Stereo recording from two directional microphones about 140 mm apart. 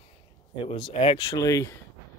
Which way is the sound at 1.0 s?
45° left (ahead or behind).